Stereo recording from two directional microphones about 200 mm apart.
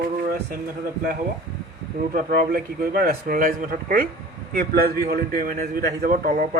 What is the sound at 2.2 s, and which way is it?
A man's voice, 45° right (ahead or behind).